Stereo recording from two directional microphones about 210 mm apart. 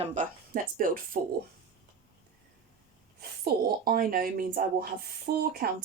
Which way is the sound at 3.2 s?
45° right (ahead or behind).